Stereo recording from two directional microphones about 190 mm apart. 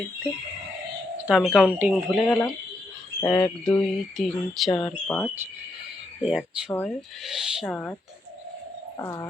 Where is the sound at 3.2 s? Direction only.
15° left (ahead or behind).